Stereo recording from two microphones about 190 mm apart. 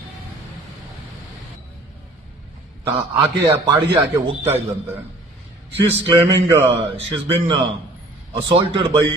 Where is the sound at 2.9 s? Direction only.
20° right (ahead or behind).